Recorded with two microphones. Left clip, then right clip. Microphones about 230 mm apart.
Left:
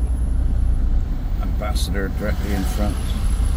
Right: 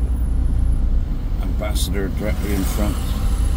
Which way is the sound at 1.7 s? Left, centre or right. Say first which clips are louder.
Even; centre.